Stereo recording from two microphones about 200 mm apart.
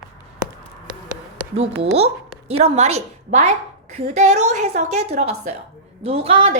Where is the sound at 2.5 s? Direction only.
30° right (ahead or behind).